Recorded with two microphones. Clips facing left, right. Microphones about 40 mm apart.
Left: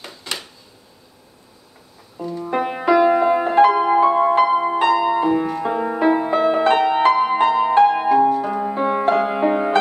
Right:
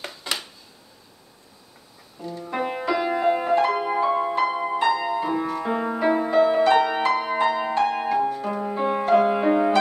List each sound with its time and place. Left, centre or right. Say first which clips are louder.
0.0 s a sound: even; centre
2.4 s music: left 6 dB; centre
5.3 s music: left 5 dB; centre
5.9 s music: left 1 dB; left